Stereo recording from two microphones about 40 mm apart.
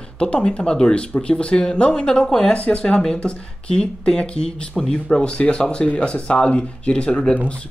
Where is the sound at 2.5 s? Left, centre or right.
Left.